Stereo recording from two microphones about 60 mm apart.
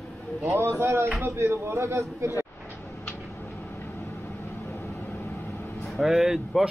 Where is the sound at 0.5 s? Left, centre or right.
Right.